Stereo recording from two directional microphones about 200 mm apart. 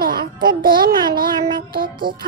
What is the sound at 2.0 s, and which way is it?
Music, 45° right (ahead or behind).